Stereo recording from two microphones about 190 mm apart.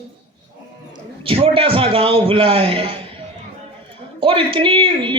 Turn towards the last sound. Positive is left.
turn(degrees=-25)  # may be behind; listen again after turning